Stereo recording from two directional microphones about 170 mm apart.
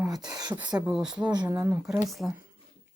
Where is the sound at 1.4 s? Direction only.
15° right (ahead or behind).